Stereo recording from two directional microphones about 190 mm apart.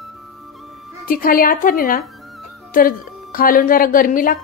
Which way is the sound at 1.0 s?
50° left (ahead or behind).